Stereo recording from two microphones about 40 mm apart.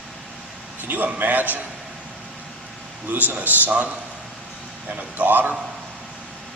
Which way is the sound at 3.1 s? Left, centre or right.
Right.